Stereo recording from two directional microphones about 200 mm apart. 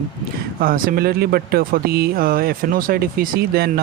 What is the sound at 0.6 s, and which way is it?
Speech, 45° right (ahead or behind).